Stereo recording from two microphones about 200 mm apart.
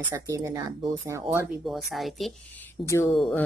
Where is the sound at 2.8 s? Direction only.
15° left (ahead or behind).